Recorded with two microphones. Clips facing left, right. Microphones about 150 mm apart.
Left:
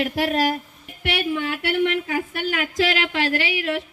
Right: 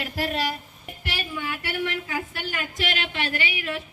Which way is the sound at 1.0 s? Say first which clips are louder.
Left 8 dB; 70° left (ahead or behind).